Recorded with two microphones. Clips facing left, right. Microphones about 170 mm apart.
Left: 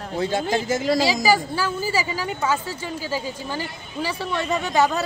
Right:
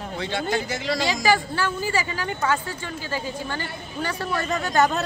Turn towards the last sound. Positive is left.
turn(degrees=0)  # may be behind; listen again after turning